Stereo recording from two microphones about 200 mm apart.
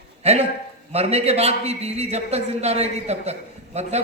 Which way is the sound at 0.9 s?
30° right (ahead or behind).